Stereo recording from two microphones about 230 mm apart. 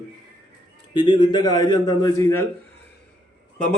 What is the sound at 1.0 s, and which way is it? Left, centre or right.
Speech, centre.